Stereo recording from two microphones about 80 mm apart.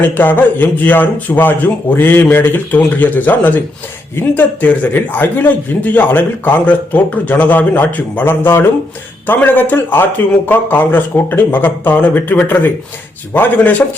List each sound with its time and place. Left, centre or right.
0.0 s a man's voice: left